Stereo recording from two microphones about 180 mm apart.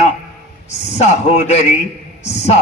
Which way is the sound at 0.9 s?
40° left (ahead or behind).